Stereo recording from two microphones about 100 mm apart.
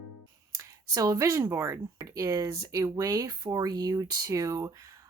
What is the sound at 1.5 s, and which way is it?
Speech, 25° right (ahead or behind).